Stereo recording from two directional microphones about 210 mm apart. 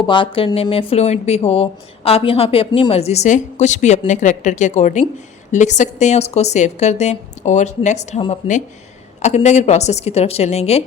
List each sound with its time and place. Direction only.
0.0 s a woman's voice: 25° left (ahead or behind)